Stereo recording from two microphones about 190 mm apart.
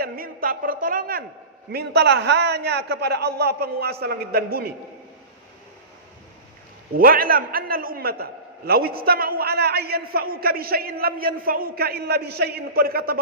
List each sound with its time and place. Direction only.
0.0 s a woman's voice: 50° right (ahead or behind)
1.7 s a man's voice: 60° right (ahead or behind)
6.9 s a man's voice: 50° right (ahead or behind)